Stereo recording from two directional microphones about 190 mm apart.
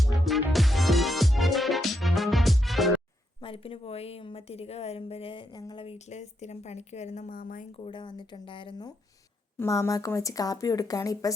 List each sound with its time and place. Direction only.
0.0 s music: centre (ahead or behind)
3.4 s a woman's voice: 30° left (ahead or behind); by 7.7 s 45° left (ahead or behind)
7.7 s speech: 25° left (ahead or behind)
9.6 s speech: 15° left (ahead or behind)